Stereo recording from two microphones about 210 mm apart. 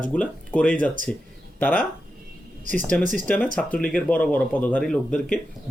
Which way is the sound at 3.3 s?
5° left (ahead or behind).